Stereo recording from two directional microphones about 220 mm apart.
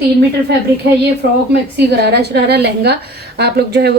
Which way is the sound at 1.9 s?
50° right (ahead or behind).